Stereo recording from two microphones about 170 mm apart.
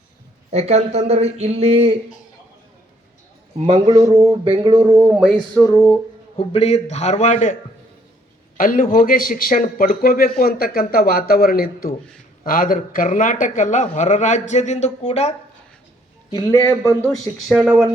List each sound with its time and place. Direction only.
0.5 s speech: 40° right (ahead or behind)
3.7 s speech: 25° right (ahead or behind)
4.8 s speech: 15° right (ahead or behind)
5.1 s music: 5° right (ahead or behind)
5.5 s a man's voice: 20° left (ahead or behind)
6.3 s a man's voice: 35° left (ahead or behind)
8.5 s a man's voice: 55° left (ahead or behind)
16.3 s a man's voice: 20° left (ahead or behind)
17.5 s speech: 10° right (ahead or behind)